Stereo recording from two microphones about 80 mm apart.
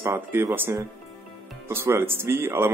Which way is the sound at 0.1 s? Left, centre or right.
Right.